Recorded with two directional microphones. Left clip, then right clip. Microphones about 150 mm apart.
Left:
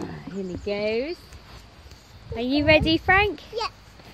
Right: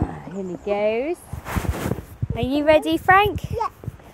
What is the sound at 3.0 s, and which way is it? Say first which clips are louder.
Speech: right 4 dB; 10° right (ahead or behind).